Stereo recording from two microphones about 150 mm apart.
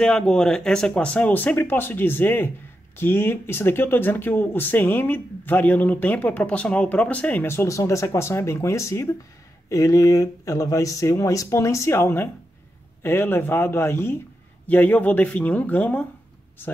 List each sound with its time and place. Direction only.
0.0 s speech: 5° left (ahead or behind)